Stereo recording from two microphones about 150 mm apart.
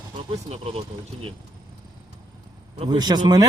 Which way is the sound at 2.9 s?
30° right (ahead or behind).